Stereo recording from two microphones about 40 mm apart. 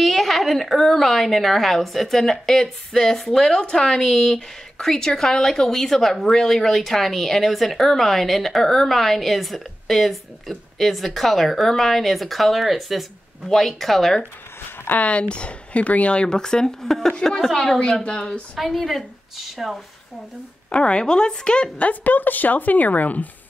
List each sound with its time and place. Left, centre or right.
0.0 s a woman's voice: centre
13.5 s a woman's voice: centre
15.0 s speech: left; by 17.7 s centre
18.0 s speech: left
18.6 s a woman's voice: centre
20.7 s speech: left
21.8 s speech: left